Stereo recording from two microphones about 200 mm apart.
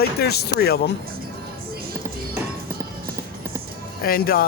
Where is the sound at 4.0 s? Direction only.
50° left (ahead or behind).